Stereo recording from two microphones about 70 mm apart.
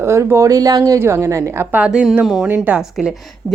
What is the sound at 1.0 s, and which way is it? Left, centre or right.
Speech, right.